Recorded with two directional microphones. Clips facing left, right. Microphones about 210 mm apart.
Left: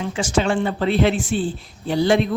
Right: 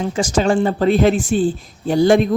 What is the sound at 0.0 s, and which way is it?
Speech, 40° right (ahead or behind).